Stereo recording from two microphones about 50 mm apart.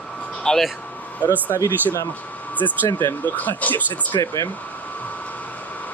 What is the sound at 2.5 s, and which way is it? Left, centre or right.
Speech, left.